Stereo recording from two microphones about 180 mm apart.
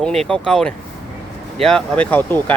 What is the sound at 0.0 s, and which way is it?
Speech, 5° left (ahead or behind).